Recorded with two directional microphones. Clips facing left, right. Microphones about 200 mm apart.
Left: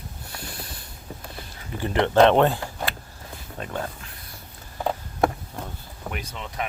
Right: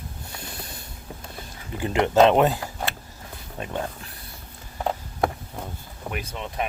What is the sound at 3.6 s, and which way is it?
Speech, 15° right (ahead or behind).